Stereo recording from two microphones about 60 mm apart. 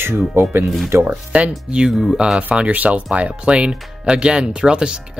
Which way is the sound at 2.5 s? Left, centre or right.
Right.